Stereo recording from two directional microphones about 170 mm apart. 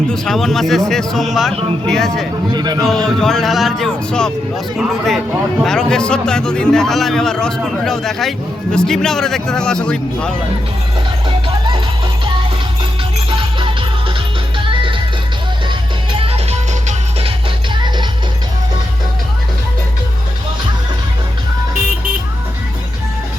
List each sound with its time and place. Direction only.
0.1 s speech: centre (ahead or behind)
2.5 s a man's voice: 25° right (ahead or behind)
2.8 s speech: centre (ahead or behind)
11.3 s music: 30° right (ahead or behind)
16.1 s music: 35° right (ahead or behind)
17.7 s music: 25° right (ahead or behind)